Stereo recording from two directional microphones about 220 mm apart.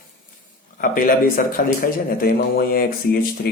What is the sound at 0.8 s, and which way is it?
A man's voice, 40° left (ahead or behind).